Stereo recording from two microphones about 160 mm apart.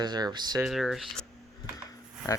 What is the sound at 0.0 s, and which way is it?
Speech, 25° right (ahead or behind).